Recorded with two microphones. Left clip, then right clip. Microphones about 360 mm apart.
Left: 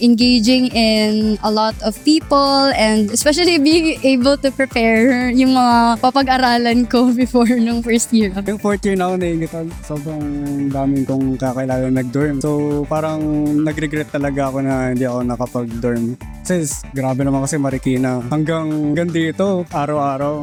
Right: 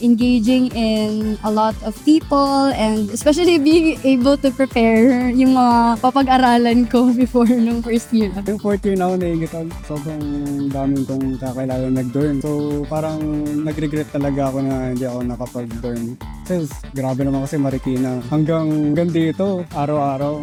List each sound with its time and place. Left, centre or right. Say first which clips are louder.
0.0 s music: left 3 dB; left
11.4 s music: left 4 dB; left
16.5 s music: left 3 dB; left